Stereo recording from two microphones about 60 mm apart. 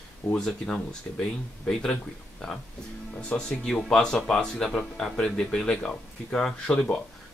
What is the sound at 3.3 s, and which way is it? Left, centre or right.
Speech, centre.